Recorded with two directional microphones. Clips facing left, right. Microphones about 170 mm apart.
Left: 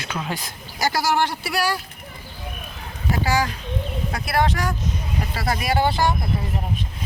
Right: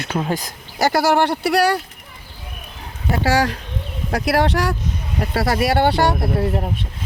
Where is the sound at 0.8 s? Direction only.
60° right (ahead or behind).